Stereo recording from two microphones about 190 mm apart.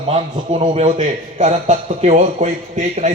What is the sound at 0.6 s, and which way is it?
A man's voice, 35° right (ahead or behind).